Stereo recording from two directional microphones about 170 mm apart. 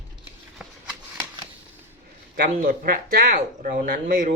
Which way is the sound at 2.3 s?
55° right (ahead or behind).